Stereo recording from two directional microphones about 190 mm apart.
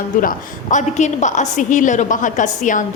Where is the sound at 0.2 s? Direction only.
45° left (ahead or behind).